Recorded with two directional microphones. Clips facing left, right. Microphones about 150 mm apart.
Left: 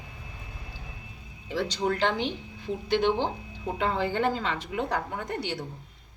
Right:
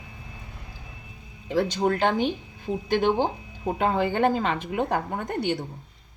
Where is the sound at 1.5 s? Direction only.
50° right (ahead or behind).